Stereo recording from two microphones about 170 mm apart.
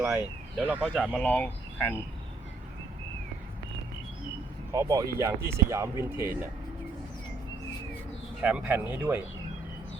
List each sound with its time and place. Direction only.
0.0 s speech: 10° right (ahead or behind)
1.2 s speech: 10° left (ahead or behind)
4.7 s speech: 20° right (ahead or behind)
8.4 s speech: 5° right (ahead or behind)